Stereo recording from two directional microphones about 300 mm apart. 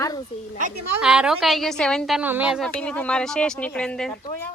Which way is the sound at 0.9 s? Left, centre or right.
Centre.